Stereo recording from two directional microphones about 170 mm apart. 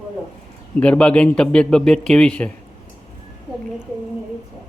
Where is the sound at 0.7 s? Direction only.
5° left (ahead or behind).